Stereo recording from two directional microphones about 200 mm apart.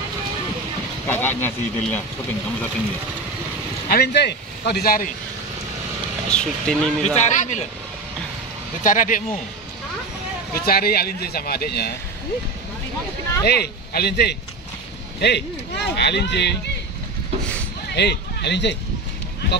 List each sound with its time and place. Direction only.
1.0 s speech: 10° left (ahead or behind)
3.9 s speech: 55° left (ahead or behind)
6.3 s speech: 5° left (ahead or behind)
7.2 s speech: 35° left (ahead or behind)
8.8 s speech: 40° left (ahead or behind)
10.5 s speech: 50° left (ahead or behind)
13.4 s speech: 55° left (ahead or behind)
17.9 s speech: 55° left (ahead or behind)